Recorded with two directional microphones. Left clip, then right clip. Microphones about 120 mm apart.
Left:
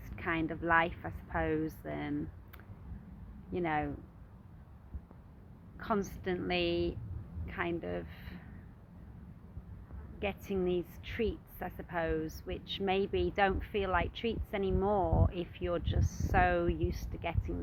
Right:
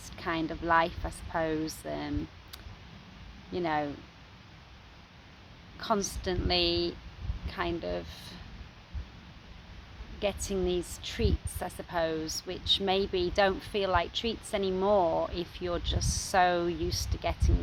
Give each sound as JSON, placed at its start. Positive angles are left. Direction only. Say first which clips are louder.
{"t": 0.0, "sound": "a woman's voice", "louder": "right 2 dB", "side_deg": -35}
{"t": 5.8, "sound": "speech", "louder": "right 4 dB", "side_deg": -25}
{"t": 10.2, "sound": "speech", "louder": "right 4 dB", "side_deg": -35}